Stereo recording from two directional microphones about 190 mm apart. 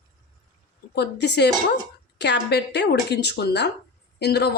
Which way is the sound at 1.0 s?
65° left (ahead or behind).